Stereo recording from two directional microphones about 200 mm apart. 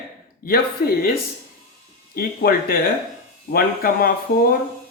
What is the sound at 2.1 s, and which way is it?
Speech, 45° left (ahead or behind).